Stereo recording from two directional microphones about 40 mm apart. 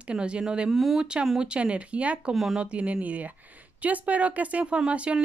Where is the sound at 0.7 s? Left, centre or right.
Centre.